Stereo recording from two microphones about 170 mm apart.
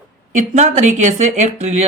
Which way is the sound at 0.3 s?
45° right (ahead or behind).